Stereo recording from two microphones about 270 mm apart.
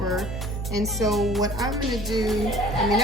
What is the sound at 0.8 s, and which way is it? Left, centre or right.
Speech, centre.